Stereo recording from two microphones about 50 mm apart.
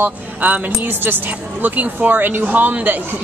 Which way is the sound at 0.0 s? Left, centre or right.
Right.